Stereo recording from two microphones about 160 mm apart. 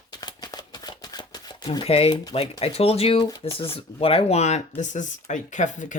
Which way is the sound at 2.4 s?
40° left (ahead or behind).